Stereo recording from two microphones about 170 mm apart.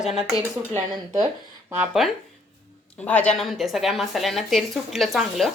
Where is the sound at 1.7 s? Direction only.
5° right (ahead or behind).